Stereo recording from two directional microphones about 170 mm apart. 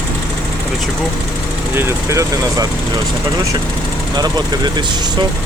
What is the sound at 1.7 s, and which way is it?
Speech, 15° right (ahead or behind).